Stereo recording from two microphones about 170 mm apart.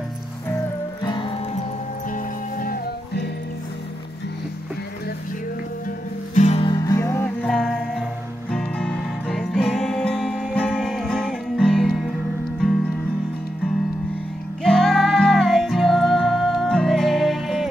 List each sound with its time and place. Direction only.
1.0 s music: 30° left (ahead or behind)
2.1 s music: 60° left (ahead or behind)
6.3 s music: 40° left (ahead or behind)
6.7 s music: 20° left (ahead or behind)
7.4 s music: 5° left (ahead or behind)
14.6 s music: 5° left (ahead or behind)